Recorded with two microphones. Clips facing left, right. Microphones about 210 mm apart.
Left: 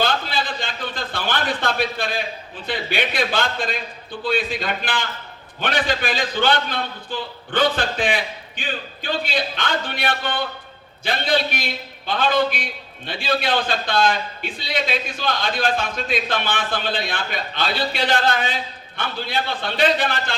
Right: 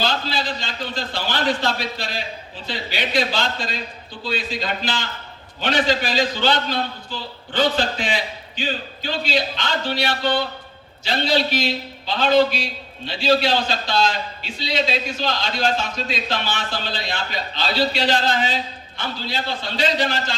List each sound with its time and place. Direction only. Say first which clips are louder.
0.0 s a man's voice: left 1 dB; 55° left (ahead or behind)
13.4 s a man's voice: right 1 dB; 55° left (ahead or behind)